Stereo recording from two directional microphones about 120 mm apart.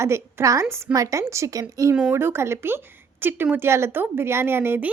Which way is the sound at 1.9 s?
15° right (ahead or behind).